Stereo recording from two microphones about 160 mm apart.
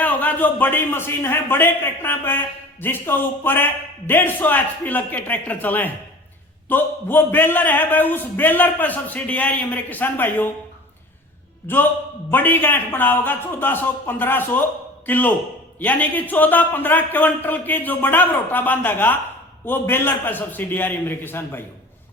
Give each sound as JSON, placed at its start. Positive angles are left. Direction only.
{"t": 0.0, "sound": "a man's voice", "side_deg": 10}
{"t": 12.3, "sound": "a man's voice", "side_deg": 10}